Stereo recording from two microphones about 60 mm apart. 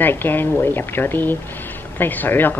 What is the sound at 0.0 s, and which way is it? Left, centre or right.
Speech, left.